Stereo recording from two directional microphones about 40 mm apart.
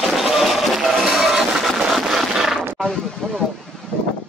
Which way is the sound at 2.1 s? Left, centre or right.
Centre.